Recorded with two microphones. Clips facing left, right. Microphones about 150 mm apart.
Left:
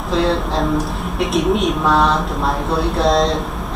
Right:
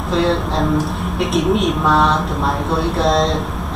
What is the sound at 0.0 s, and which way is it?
A woman's voice, centre (ahead or behind).